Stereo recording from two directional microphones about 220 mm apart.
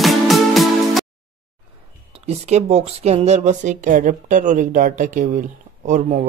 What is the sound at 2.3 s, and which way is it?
Speech, 30° right (ahead or behind).